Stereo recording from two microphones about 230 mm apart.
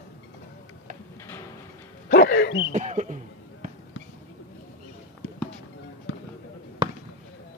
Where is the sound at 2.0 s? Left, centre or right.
Left.